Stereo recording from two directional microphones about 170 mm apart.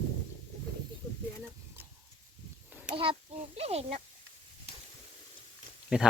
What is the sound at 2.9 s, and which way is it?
A child's voice, 30° right (ahead or behind).